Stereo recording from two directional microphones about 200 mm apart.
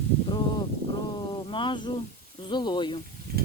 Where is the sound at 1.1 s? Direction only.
25° left (ahead or behind).